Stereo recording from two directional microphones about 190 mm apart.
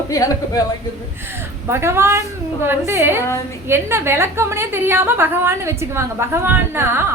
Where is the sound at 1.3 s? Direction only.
10° right (ahead or behind).